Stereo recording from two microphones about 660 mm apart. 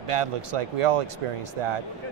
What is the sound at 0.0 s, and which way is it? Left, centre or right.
A man's voice, right.